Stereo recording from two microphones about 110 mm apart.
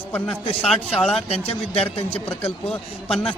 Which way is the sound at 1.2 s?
60° left (ahead or behind).